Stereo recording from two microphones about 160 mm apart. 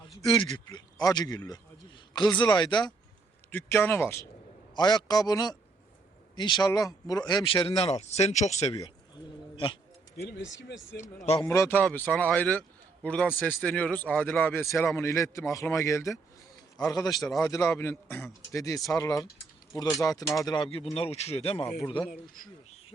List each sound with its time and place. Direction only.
0.3 s a man's voice: 30° left (ahead or behind)
3.5 s a man's voice: 15° left (ahead or behind)
4.7 s a man's voice: 25° left (ahead or behind); by 8.8 s 45° left (ahead or behind)
8.8 s pigeon: 30° left (ahead or behind)
10.2 s speech: 90° left
11.3 s a man's voice: 20° left (ahead or behind)
20.2 s speech: centre (ahead or behind)
20.5 s speech: 30° left (ahead or behind)